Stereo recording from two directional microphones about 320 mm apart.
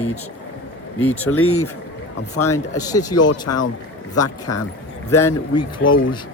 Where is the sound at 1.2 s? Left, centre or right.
Left.